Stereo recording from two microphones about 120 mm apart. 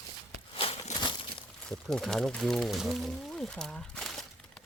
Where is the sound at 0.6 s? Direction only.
55° left (ahead or behind).